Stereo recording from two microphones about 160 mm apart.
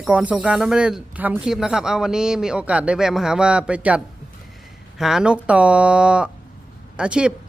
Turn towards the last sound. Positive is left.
turn(degrees=-5)  # may be behind; listen again after turning